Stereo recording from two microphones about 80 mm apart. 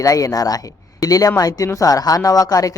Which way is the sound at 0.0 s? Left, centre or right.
Left.